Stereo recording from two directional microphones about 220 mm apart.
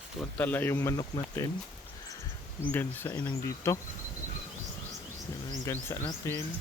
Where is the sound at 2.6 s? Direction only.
10° left (ahead or behind).